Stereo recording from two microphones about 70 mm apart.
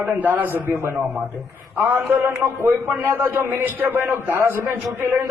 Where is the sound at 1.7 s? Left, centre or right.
Right.